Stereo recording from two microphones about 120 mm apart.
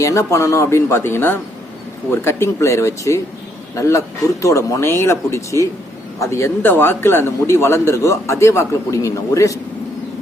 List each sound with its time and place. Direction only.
0.0 s a man's voice: 25° left (ahead or behind)